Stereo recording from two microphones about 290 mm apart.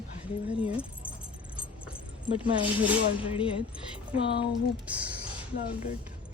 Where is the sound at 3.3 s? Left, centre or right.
Centre.